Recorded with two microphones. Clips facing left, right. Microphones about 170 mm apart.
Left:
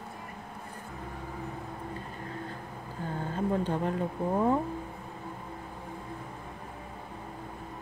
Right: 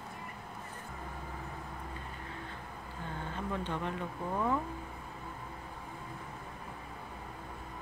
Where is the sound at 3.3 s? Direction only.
40° left (ahead or behind).